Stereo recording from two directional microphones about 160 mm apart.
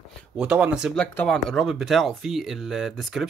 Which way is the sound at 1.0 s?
5° left (ahead or behind).